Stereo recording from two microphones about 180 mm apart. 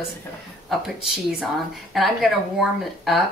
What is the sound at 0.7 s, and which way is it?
Speech, centre (ahead or behind).